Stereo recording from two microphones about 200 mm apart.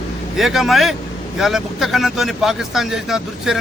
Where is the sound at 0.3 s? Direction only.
Centre (ahead or behind).